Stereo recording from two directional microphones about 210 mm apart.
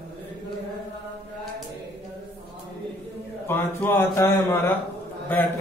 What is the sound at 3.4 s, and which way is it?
A man's voice, 10° left (ahead or behind).